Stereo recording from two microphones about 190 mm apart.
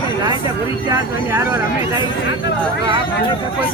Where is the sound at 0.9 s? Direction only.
15° right (ahead or behind).